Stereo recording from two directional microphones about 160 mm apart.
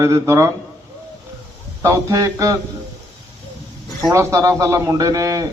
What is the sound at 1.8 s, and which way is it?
Speech, 20° right (ahead or behind).